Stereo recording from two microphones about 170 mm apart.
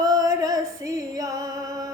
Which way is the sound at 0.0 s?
20° right (ahead or behind).